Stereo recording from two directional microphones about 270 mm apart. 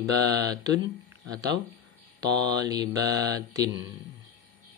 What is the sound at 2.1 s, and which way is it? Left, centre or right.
Mantra, centre.